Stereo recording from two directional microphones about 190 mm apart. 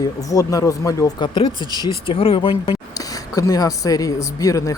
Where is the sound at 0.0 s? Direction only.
20° left (ahead or behind).